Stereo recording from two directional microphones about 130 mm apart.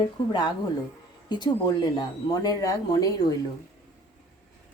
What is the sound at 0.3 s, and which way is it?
A woman's voice, 35° left (ahead or behind).